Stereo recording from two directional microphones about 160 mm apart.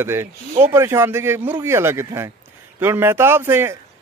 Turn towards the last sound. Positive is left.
turn(degrees=-15)  # may be behind; listen again after turning